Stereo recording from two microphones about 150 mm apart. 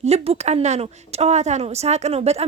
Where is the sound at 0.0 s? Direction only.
45° right (ahead or behind).